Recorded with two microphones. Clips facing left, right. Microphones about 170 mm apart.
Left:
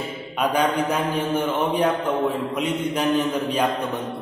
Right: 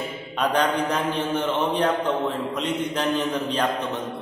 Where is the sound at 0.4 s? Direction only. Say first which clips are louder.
Left 1 dB; 10° left (ahead or behind).